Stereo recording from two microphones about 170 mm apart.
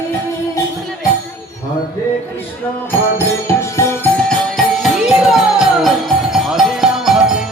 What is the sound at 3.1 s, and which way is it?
Music, 15° left (ahead or behind).